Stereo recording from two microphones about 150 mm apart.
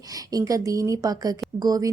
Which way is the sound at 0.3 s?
25° right (ahead or behind).